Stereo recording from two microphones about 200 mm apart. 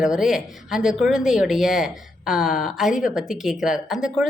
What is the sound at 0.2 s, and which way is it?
Speech, centre (ahead or behind).